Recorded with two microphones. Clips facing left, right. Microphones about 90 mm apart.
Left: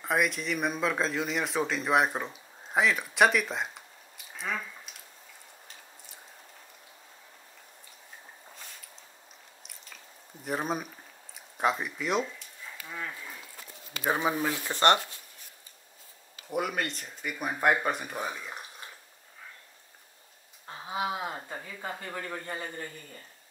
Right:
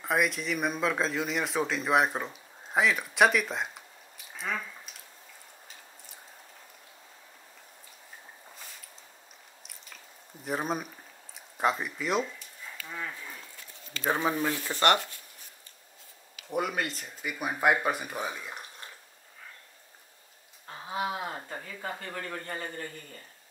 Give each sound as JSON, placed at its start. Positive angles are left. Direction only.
{"t": 0.0, "sound": "speech", "side_deg": 0}
{"t": 4.3, "sound": "a sound", "side_deg": 0}
{"t": 8.5, "sound": "a sound", "side_deg": 0}
{"t": 9.7, "sound": "chewing", "side_deg": 0}
{"t": 11.3, "sound": "a sound", "side_deg": 0}
{"t": 12.8, "sound": "livestock", "side_deg": 0}
{"t": 13.9, "sound": "speech", "side_deg": 10}
{"t": 16.4, "sound": "speech", "side_deg": 0}
{"t": 20.6, "sound": "speech", "side_deg": 15}